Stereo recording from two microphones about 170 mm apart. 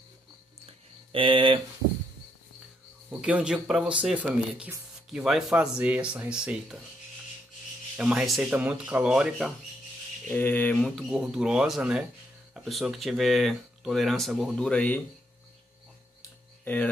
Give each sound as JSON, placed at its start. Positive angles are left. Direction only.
{"t": 1.1, "sound": "speech", "side_deg": -30}
{"t": 3.1, "sound": "speech", "side_deg": -10}
{"t": 8.0, "sound": "speech", "side_deg": -5}
{"t": 10.2, "sound": "speech", "side_deg": 10}
{"t": 16.6, "sound": "speech", "side_deg": 10}